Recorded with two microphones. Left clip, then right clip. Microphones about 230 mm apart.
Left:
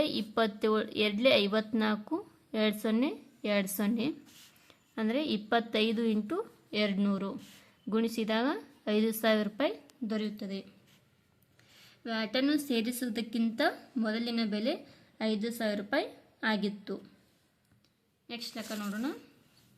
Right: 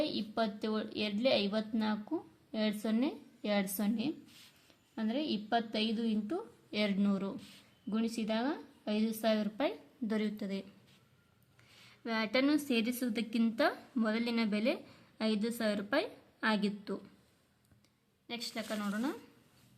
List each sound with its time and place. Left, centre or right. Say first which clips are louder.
0.0 s a woman's voice: left 5 dB; left; by 10.8 s centre
12.0 s a woman's voice: left 1 dB; centre
18.3 s a woman's voice: even; centre